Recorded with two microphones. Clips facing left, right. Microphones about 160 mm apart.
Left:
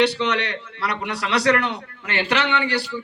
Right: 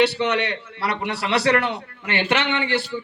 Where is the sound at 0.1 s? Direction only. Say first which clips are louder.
Right 1 dB; 30° right (ahead or behind).